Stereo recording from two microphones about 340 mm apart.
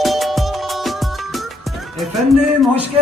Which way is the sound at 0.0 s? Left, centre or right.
Centre.